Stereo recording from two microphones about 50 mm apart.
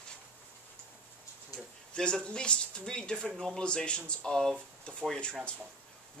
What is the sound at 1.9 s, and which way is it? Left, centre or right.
Speech, centre.